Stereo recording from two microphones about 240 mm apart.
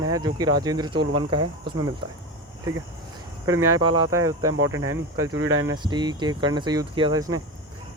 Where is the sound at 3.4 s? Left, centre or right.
Centre.